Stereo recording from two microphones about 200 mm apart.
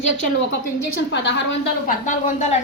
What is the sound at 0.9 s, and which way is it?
Speech, 60° left (ahead or behind).